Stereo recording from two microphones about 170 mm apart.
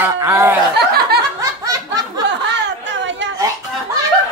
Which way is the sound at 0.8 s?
70° right (ahead or behind).